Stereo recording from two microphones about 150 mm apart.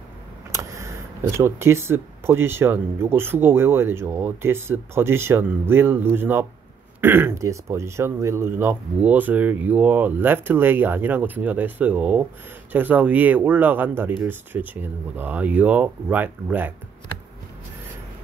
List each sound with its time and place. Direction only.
0.5 s speech: 20° right (ahead or behind)